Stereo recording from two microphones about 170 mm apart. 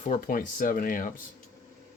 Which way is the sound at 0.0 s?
45° left (ahead or behind).